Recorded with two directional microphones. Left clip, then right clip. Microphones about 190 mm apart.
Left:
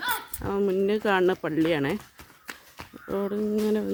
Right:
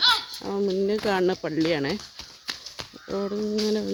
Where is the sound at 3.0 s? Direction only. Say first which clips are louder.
Even; 15° left (ahead or behind).